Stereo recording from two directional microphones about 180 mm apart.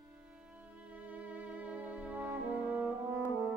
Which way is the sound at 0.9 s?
10° right (ahead or behind).